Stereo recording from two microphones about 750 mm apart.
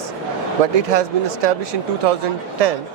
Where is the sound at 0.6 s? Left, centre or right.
Right.